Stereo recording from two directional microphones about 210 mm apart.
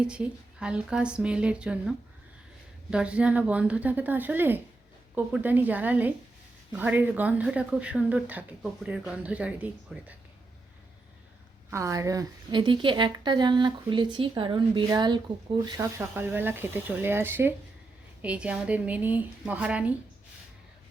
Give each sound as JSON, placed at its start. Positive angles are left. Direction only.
{"t": 0.0, "sound": "speech", "side_deg": -5}
{"t": 11.7, "sound": "a woman's voice", "side_deg": -15}